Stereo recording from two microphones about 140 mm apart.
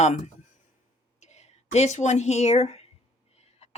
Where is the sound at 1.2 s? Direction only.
50° left (ahead or behind).